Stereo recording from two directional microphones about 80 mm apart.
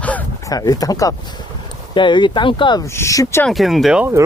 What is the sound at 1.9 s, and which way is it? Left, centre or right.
Speech, left.